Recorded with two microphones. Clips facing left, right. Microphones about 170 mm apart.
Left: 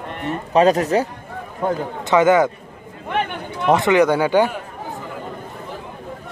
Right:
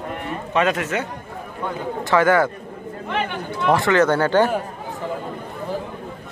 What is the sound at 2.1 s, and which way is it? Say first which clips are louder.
Speech: left 3 dB; 20° left (ahead or behind).